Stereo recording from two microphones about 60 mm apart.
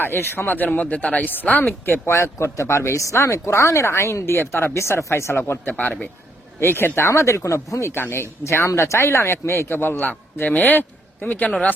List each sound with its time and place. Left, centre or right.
0.0 s speech: left
2.1 s speech: left
5.4 s speech: left
6.6 s speech: left
7.1 s speech: left
7.9 s speech: left